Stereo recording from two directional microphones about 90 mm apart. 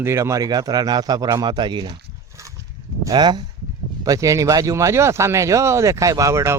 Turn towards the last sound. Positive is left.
turn(degrees=-35)  # may be behind; listen again after turning